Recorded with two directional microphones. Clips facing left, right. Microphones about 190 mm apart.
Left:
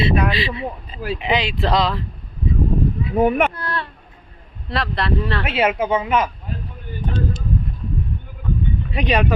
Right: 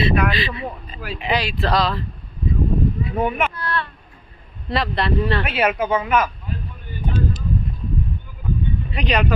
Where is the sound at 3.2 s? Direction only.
45° left (ahead or behind).